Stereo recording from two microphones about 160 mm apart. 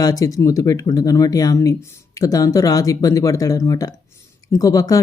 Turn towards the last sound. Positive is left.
turn(degrees=20)  # may be behind; listen again after turning